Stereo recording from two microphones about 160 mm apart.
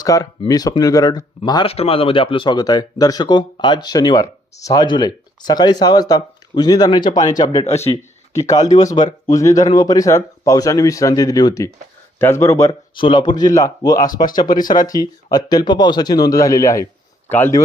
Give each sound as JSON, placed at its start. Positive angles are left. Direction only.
{"t": 0.0, "sound": "speech", "side_deg": 25}
{"t": 1.7, "sound": "speech", "side_deg": 35}
{"t": 7.6, "sound": "speech", "side_deg": 45}
{"t": 8.4, "sound": "speech", "side_deg": 20}